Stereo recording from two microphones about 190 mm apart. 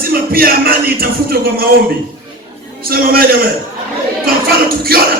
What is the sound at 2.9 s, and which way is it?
Speech, 50° right (ahead or behind).